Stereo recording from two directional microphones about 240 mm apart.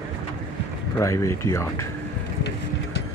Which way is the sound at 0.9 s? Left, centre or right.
Centre.